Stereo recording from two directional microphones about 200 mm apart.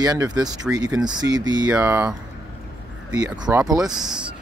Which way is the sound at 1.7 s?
10° right (ahead or behind).